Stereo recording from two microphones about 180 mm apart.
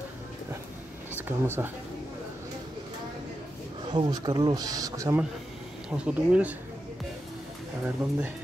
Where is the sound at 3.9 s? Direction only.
25° right (ahead or behind).